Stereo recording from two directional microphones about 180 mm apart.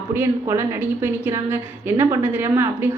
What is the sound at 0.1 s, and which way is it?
A woman's voice, 15° right (ahead or behind).